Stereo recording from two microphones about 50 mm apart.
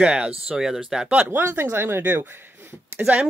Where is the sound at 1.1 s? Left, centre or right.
Right.